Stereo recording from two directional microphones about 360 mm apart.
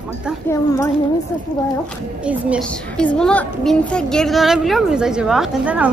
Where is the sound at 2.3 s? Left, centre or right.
Centre.